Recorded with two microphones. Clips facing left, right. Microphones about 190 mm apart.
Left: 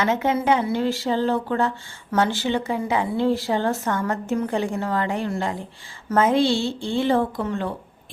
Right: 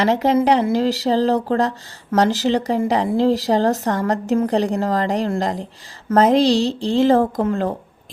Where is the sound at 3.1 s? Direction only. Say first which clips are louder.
Right 4 dB; 90° right.